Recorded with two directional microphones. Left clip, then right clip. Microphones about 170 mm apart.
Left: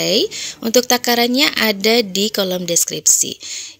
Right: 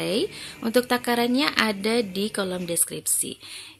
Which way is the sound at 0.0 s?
35° left (ahead or behind).